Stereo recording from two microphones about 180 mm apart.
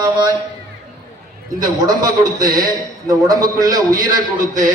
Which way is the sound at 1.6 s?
20° right (ahead or behind).